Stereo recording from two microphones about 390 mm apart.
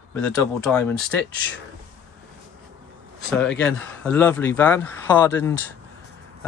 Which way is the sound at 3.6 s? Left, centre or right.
Centre.